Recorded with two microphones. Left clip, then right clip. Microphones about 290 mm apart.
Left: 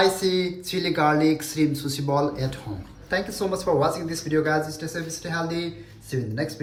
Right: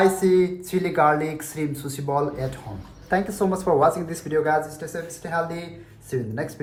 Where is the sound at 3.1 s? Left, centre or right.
Centre.